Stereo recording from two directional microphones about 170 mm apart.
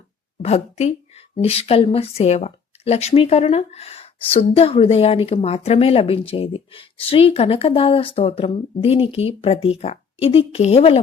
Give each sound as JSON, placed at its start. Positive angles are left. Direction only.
{"t": 0.4, "sound": "a woman's voice", "side_deg": 40}